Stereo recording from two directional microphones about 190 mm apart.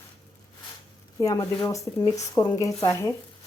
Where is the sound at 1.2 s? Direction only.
20° left (ahead or behind).